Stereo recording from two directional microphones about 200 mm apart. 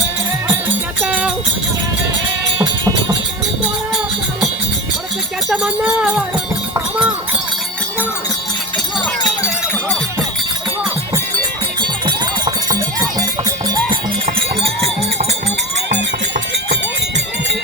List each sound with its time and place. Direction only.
1.0 s music: 5° right (ahead or behind)
2.6 s goat: 20° right (ahead or behind)
5.5 s a sound: 5° right (ahead or behind)
9.4 s a sound: 5° left (ahead or behind)
11.8 s music: 20° right (ahead or behind)
15.9 s run: 55° right (ahead or behind)